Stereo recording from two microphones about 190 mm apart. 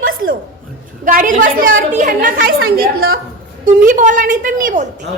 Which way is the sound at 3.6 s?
45° right (ahead or behind).